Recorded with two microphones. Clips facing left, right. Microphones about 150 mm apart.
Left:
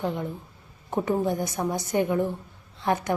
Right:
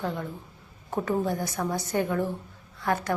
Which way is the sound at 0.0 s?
15° left (ahead or behind).